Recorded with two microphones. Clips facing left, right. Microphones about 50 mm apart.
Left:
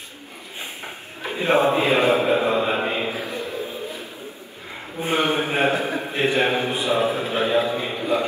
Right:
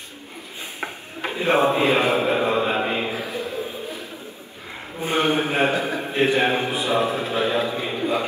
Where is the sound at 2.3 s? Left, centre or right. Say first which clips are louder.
Left 1 dB; centre.